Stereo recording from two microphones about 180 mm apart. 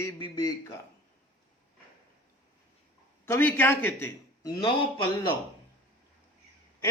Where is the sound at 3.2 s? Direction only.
10° left (ahead or behind).